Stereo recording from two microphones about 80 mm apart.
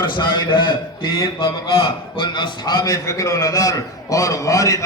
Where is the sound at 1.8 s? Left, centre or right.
Left.